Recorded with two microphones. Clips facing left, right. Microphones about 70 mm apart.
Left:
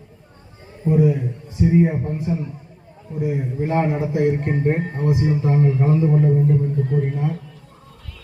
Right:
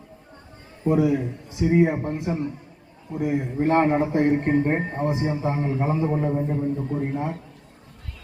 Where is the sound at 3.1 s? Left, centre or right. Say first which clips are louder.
Even; right.